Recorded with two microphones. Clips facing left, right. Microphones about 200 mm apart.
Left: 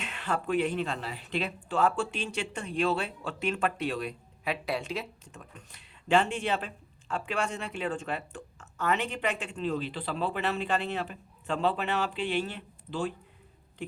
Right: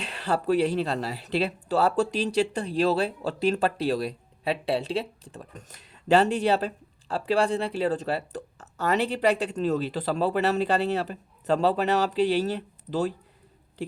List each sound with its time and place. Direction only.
0.0 s speech: 35° right (ahead or behind)